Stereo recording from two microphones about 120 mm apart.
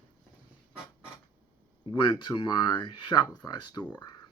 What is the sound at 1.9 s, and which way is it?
Speech, 40° left (ahead or behind).